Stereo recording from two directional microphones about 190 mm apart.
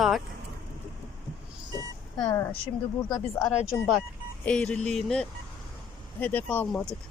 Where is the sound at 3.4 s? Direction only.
5° right (ahead or behind).